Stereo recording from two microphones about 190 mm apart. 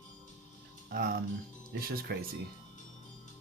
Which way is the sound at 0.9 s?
50° right (ahead or behind).